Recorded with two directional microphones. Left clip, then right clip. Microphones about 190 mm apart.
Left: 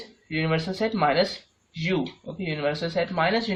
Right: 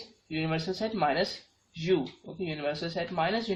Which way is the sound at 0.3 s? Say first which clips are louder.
Left 5 dB; 30° left (ahead or behind).